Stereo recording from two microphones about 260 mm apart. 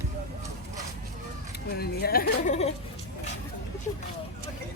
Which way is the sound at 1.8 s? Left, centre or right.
Left.